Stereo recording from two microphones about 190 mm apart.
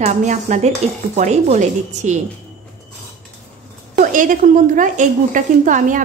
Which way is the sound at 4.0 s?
45° right (ahead or behind).